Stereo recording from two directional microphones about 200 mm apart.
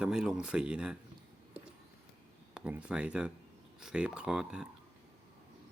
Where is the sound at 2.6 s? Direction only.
5° right (ahead or behind).